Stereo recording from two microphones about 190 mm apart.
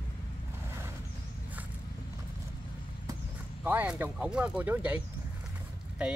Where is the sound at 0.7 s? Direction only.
15° right (ahead or behind).